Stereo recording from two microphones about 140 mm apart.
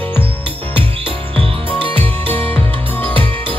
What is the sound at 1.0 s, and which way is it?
Music, 40° right (ahead or behind).